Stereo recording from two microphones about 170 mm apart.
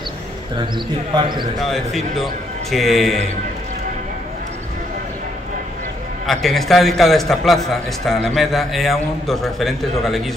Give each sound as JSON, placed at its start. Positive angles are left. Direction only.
{"t": 1.1, "sound": "speech", "side_deg": -25}
{"t": 1.6, "sound": "a man's voice", "side_deg": 0}
{"t": 6.2, "sound": "a man's voice", "side_deg": 0}